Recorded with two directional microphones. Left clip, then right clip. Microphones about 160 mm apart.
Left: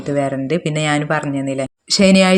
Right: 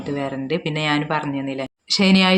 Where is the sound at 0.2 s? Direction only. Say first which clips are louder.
Left 7 dB; 40° left (ahead or behind).